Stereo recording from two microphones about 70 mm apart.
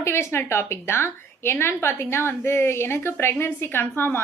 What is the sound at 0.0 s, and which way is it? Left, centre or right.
A woman's voice, left.